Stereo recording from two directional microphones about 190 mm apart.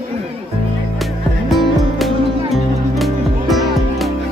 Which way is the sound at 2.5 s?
Centre (ahead or behind).